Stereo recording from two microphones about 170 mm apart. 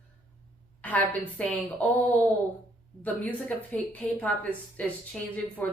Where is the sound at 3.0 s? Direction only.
10° left (ahead or behind).